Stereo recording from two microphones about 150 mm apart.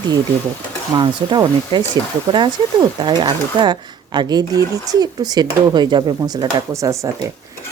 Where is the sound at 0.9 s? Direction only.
25° right (ahead or behind).